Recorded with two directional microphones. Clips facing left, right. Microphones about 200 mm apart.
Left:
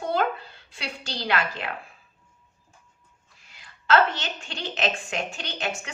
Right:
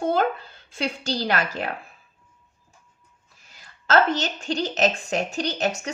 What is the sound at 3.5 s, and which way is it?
A woman's voice, 45° right (ahead or behind).